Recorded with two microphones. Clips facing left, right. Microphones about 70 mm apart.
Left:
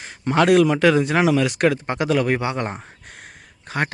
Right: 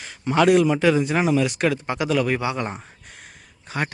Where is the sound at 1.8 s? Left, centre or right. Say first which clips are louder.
Left 2 dB; left.